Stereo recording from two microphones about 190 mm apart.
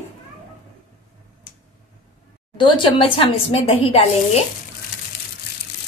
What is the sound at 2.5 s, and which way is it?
A woman's voice, 25° left (ahead or behind).